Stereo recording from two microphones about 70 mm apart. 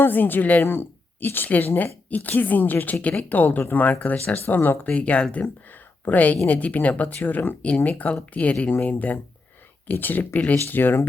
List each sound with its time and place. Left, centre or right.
0.0 s speech: left